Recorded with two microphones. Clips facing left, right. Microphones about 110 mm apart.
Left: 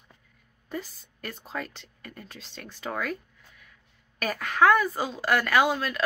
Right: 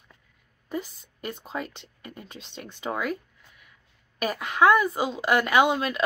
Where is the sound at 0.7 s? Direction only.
15° right (ahead or behind).